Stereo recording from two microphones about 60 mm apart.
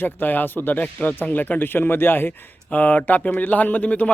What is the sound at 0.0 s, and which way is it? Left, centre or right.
Speech, left.